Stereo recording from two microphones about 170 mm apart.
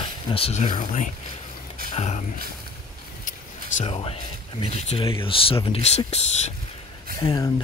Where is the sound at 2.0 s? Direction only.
40° left (ahead or behind).